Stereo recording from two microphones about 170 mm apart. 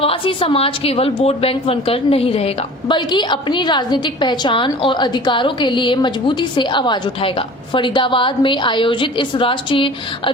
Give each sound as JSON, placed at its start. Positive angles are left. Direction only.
{"t": 0.0, "sound": "a woman's voice", "side_deg": 35}